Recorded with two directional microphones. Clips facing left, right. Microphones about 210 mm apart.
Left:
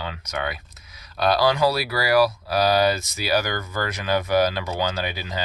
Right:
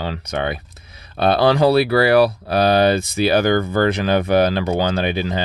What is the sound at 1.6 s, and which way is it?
Speech, 60° right (ahead or behind).